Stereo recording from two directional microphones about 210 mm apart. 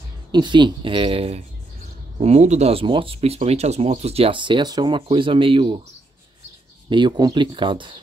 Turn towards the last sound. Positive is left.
turn(degrees=-25)  # may be behind; listen again after turning